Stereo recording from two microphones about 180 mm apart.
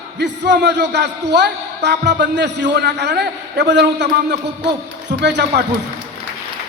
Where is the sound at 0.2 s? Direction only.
75° right (ahead or behind).